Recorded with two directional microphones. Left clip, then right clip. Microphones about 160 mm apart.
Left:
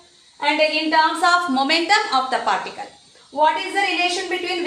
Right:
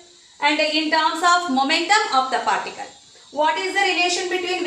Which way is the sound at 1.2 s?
35° left (ahead or behind).